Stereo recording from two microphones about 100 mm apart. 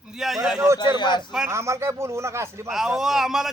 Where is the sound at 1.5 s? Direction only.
30° right (ahead or behind).